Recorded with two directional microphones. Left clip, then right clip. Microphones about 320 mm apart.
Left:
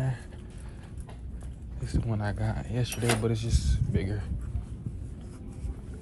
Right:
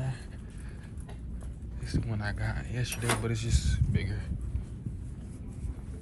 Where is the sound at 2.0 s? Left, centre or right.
Centre.